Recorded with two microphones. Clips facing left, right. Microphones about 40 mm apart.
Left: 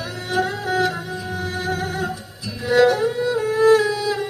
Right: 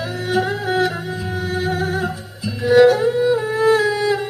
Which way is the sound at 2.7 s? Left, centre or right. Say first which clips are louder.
Right 4 dB; centre.